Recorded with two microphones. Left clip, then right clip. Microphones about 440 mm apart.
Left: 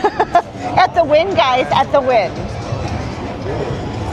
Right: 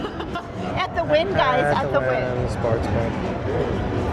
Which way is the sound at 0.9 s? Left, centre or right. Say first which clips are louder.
Left 7 dB; centre.